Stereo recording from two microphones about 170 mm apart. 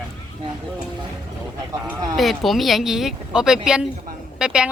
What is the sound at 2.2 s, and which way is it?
Speech, centre (ahead or behind).